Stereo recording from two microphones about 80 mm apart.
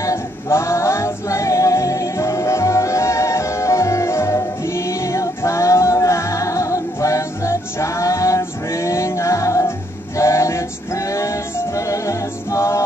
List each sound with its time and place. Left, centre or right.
0.0 s female singing: left
10.1 s music: left